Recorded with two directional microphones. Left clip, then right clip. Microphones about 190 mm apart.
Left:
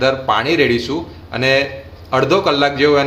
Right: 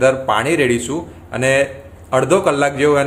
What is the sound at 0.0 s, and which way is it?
A man's voice, 10° right (ahead or behind).